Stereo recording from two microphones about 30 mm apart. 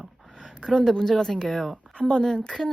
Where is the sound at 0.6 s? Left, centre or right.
Centre.